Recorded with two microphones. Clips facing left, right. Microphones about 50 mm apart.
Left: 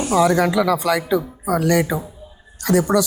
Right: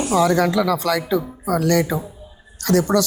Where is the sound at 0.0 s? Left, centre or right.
Centre.